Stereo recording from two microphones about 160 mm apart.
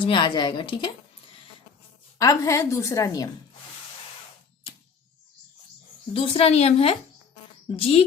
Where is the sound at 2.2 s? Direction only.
20° left (ahead or behind).